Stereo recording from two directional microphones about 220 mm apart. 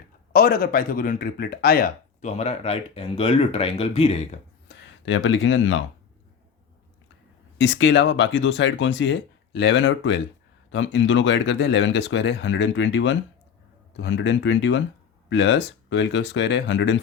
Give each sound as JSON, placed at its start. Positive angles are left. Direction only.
{"t": 0.3, "sound": "speech", "side_deg": 40}
{"t": 2.3, "sound": "speech", "side_deg": 30}
{"t": 4.7, "sound": "speech", "side_deg": 60}
{"t": 7.6, "sound": "speech", "side_deg": 55}